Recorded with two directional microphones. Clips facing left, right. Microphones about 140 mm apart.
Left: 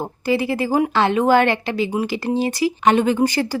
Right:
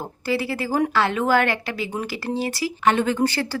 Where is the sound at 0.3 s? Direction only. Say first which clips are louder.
Left 4 dB; 20° left (ahead or behind).